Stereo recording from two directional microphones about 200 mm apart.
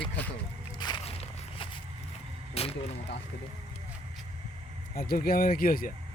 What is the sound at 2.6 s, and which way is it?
Speech, 30° left (ahead or behind).